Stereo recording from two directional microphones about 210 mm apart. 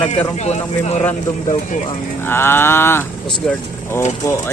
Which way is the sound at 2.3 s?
10° left (ahead or behind).